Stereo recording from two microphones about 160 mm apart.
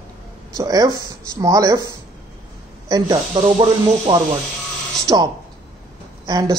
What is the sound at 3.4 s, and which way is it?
Speech, 35° right (ahead or behind).